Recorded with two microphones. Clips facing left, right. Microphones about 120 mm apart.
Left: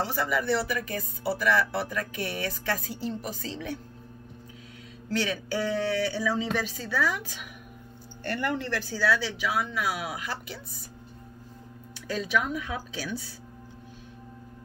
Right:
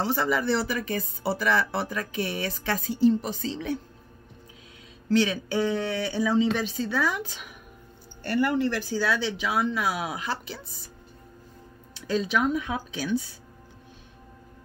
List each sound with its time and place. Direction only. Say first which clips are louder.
0.0 s speech: right 3 dB; 30° right (ahead or behind)
5.1 s speech: right 5 dB; 20° right (ahead or behind)
8.2 s speech: right 6 dB; 10° right (ahead or behind); by 10.6 s 30° right (ahead or behind)
11.9 s speech: right 2 dB; 25° right (ahead or behind)